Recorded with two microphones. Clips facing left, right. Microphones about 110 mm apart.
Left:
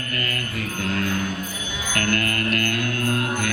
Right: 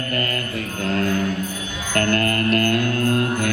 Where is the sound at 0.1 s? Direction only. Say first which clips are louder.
Right 3 dB; 35° right (ahead or behind).